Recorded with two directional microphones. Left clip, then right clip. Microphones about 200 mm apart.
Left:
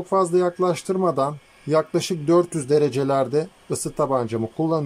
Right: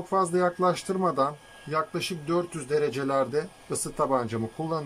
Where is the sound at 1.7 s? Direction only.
25° left (ahead or behind).